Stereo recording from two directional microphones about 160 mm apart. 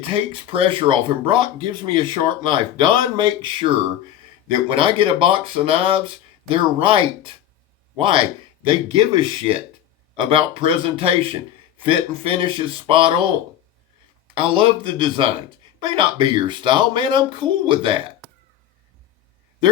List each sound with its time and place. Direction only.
0.1 s speech: 35° right (ahead or behind)
14.3 s speech: 35° right (ahead or behind)